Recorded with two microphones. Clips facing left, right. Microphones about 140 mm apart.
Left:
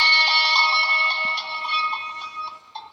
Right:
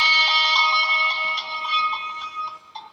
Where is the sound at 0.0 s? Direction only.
30° left (ahead or behind).